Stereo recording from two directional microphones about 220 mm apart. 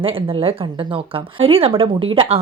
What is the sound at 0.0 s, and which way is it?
Speech, 25° right (ahead or behind).